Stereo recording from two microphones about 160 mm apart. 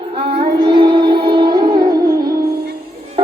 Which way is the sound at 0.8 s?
30° right (ahead or behind).